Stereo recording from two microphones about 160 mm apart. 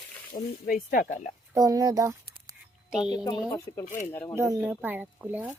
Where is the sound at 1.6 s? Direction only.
25° right (ahead or behind).